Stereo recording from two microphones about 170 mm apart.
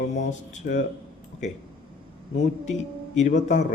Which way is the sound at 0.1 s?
45° left (ahead or behind).